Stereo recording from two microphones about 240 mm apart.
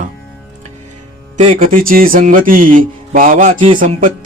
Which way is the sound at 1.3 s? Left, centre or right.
Right.